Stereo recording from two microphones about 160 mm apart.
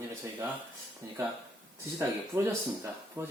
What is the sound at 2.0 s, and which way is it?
Speech, 15° right (ahead or behind).